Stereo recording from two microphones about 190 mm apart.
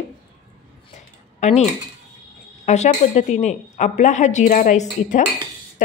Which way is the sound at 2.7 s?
35° left (ahead or behind).